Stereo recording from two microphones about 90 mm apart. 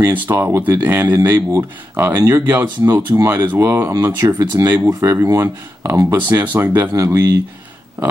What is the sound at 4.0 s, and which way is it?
Speech, 35° right (ahead or behind).